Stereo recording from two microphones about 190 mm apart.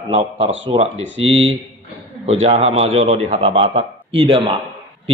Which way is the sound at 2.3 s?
30° right (ahead or behind).